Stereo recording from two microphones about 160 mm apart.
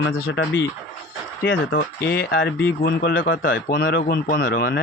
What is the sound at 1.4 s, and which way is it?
Speech, 70° left (ahead or behind).